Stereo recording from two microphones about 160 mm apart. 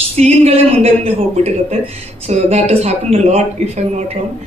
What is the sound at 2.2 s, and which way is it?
A man's voice, 45° right (ahead or behind).